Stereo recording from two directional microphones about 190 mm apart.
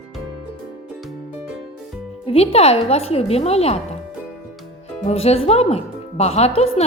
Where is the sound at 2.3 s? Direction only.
30° left (ahead or behind).